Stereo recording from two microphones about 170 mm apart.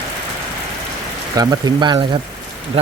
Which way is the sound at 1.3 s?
25° right (ahead or behind).